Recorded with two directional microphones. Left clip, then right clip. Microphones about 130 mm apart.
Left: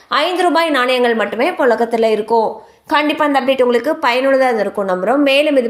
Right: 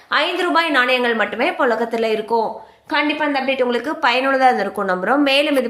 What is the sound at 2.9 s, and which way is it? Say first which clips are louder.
Speech: left 5 dB; 55° left (ahead or behind).